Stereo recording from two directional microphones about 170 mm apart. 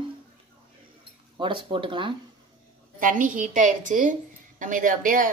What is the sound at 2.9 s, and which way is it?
Speech, 55° right (ahead or behind).